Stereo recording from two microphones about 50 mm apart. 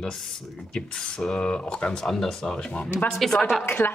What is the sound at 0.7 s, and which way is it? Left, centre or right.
Speech, centre.